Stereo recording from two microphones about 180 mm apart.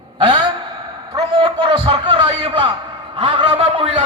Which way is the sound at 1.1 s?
25° right (ahead or behind).